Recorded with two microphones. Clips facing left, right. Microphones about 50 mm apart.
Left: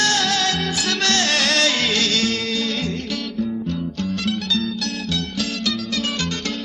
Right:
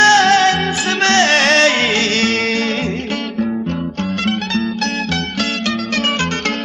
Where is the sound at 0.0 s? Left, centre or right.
Right.